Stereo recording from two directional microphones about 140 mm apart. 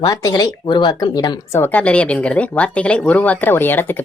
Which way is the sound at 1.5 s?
15° left (ahead or behind).